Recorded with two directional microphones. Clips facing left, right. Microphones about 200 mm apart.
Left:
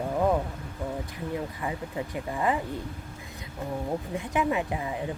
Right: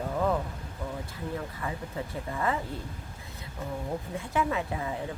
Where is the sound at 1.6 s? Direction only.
15° left (ahead or behind).